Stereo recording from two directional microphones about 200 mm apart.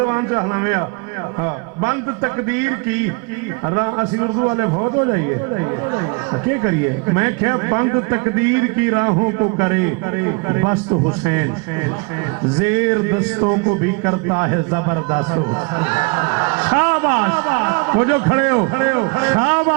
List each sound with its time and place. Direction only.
0.0 s a man's voice: 20° right (ahead or behind)
7.2 s a man's voice: 20° right (ahead or behind)
14.0 s a man's voice: 25° right (ahead or behind)